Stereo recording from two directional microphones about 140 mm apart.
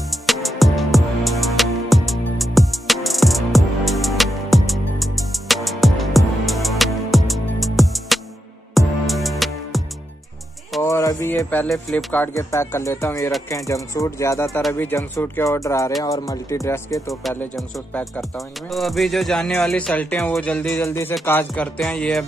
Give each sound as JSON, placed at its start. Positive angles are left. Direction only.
{"t": 0.1, "sound": "music", "side_deg": 0}
{"t": 10.8, "sound": "music", "side_deg": 20}
{"t": 11.7, "sound": "speech", "side_deg": 0}
{"t": 12.1, "sound": "speech", "side_deg": 15}
{"t": 17.9, "sound": "music", "side_deg": 10}
{"t": 18.7, "sound": "speech", "side_deg": 0}
{"t": 20.3, "sound": "music", "side_deg": 5}
{"t": 21.7, "sound": "speech", "side_deg": 5}